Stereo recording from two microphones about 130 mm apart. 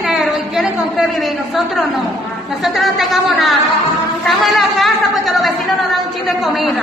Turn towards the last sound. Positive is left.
turn(degrees=0)  # may be behind; listen again after turning